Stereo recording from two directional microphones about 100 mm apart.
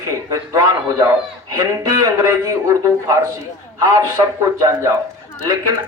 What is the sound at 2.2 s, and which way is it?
Speech, 30° right (ahead or behind).